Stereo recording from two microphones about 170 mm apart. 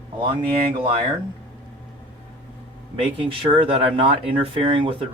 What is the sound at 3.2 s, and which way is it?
Speech, 30° right (ahead or behind).